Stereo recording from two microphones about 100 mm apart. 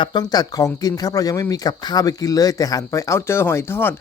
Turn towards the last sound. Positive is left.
turn(degrees=25)  # may be behind; listen again after turning